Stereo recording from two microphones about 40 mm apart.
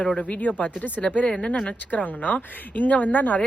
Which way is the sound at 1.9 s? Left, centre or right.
Left.